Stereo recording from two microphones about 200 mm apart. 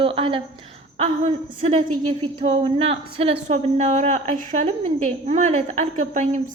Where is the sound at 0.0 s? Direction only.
25° right (ahead or behind).